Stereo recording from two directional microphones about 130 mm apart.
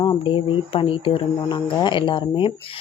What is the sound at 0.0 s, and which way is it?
Speech, 45° left (ahead or behind).